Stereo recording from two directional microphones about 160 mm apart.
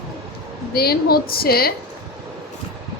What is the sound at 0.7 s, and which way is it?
Speech, 75° left (ahead or behind).